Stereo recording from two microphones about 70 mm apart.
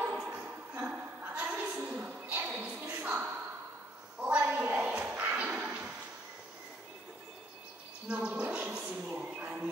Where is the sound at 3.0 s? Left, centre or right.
Centre.